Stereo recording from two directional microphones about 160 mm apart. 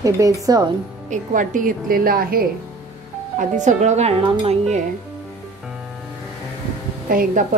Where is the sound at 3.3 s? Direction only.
50° right (ahead or behind).